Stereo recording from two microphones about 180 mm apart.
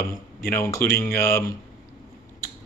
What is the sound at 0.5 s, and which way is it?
Speech, 15° left (ahead or behind).